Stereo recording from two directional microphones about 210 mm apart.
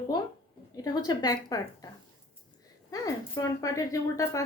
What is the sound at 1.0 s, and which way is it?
Speech, 20° left (ahead or behind).